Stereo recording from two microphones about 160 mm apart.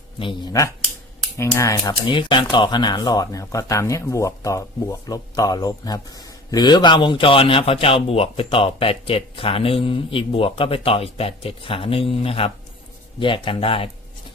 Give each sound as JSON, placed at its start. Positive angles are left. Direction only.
{"t": 0.2, "sound": "speech", "side_deg": 30}
{"t": 1.4, "sound": "speech", "side_deg": 20}